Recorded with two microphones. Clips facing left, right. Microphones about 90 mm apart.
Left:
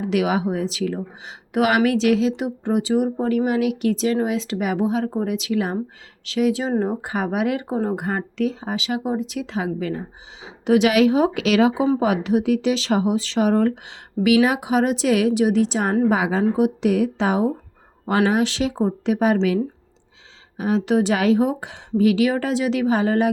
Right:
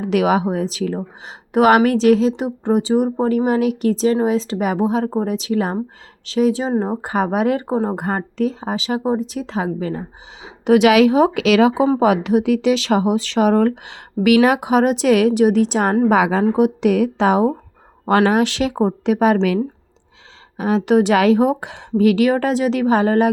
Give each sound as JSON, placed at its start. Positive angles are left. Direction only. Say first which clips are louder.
{"t": 0.0, "sound": "speech", "louder": "right 4 dB", "side_deg": -50}
{"t": 7.0, "sound": "speech", "louder": "right 4 dB", "side_deg": -45}
{"t": 10.4, "sound": "speech", "louder": "right 4 dB", "side_deg": -75}
{"t": 16.0, "sound": "speech", "louder": "right 4 dB", "side_deg": -80}
{"t": 20.6, "sound": "speech", "louder": "right 4 dB", "side_deg": -75}